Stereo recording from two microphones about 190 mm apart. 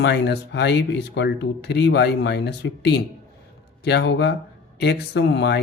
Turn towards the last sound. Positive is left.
turn(degrees=65)  # may be behind; listen again after turning